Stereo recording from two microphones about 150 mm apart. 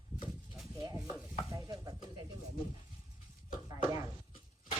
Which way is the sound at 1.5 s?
25° right (ahead or behind).